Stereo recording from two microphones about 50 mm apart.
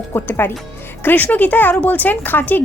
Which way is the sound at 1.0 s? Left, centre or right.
Left.